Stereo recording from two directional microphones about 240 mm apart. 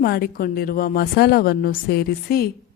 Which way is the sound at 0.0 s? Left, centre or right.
Left.